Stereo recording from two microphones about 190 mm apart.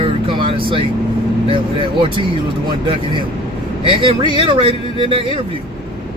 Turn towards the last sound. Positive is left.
turn(degrees=-30)  # may be behind; listen again after turning